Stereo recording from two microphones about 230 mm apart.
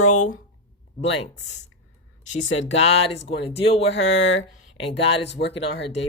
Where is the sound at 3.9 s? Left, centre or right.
Left.